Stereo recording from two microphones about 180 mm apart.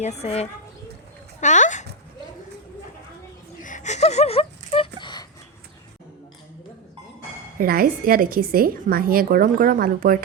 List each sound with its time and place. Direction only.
0.0 s a woman's voice: 35° left (ahead or behind)
1.4 s dog: 40° left (ahead or behind)
3.6 s whimper: 45° left (ahead or behind); by 5.2 s 25° left (ahead or behind)
7.6 s a woman's voice: 55° right (ahead or behind)